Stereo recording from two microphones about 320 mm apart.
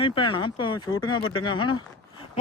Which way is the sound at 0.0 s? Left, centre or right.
Centre.